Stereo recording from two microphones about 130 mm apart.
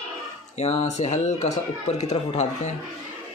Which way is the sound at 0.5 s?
55° left (ahead or behind).